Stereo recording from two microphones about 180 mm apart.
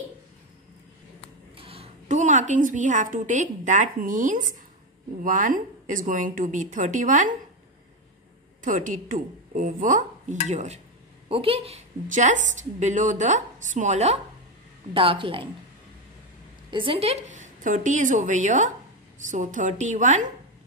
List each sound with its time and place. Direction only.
1.6 s a woman's voice: 30° right (ahead or behind)
8.6 s a woman's voice: 45° right (ahead or behind); by 15.4 s 30° right (ahead or behind)
16.7 s speech: 30° right (ahead or behind)